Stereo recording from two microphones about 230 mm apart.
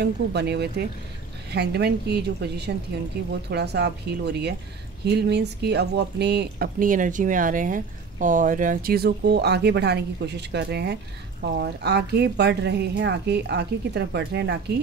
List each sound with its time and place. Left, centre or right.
0.0 s speech: right